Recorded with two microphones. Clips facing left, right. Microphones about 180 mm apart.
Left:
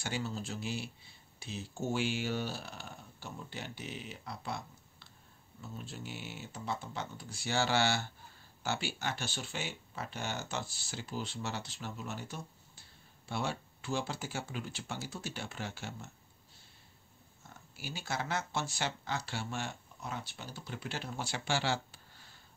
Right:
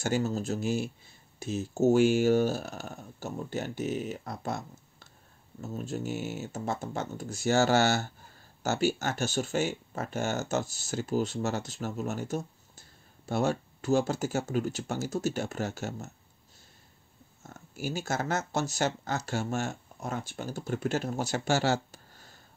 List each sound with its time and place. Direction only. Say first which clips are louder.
0.0 s speech: right 9 dB; 45° right (ahead or behind)
17.4 s speech: right 11 dB; 45° right (ahead or behind)